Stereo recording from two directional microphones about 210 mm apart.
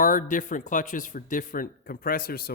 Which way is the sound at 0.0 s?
40° left (ahead or behind).